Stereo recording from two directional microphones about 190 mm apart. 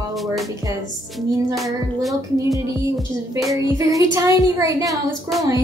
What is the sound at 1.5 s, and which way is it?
Music, centre (ahead or behind).